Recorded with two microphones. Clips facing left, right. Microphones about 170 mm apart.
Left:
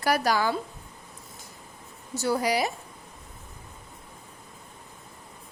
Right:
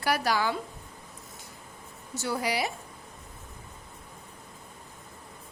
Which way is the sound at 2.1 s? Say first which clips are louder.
Left 5 dB; 40° left (ahead or behind).